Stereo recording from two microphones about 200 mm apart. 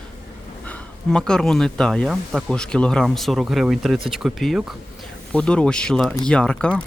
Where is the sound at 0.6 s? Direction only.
5° left (ahead or behind).